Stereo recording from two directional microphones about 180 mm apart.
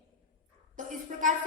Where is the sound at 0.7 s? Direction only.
45° right (ahead or behind).